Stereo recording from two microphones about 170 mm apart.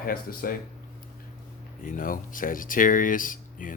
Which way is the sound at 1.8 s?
55° left (ahead or behind).